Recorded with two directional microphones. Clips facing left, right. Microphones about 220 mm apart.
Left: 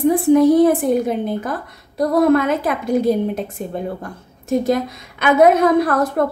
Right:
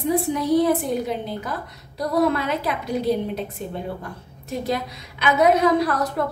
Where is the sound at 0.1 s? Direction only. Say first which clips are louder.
Left 6 dB; 50° left (ahead or behind).